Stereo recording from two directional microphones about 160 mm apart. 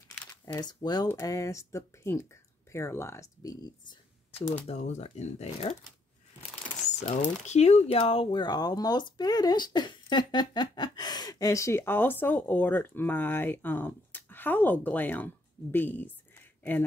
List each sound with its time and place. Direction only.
0.3 s speech: 25° left (ahead or behind)
4.6 s speech: 45° left (ahead or behind)
7.0 s speech: 45° left (ahead or behind); by 16.1 s 10° left (ahead or behind)